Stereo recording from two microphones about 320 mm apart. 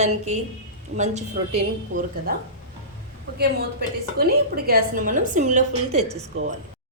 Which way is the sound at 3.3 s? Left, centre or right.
Right.